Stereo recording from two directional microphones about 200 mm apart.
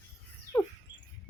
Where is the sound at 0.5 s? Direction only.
20° left (ahead or behind).